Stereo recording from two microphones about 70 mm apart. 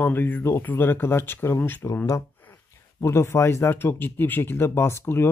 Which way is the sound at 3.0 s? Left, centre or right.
Left.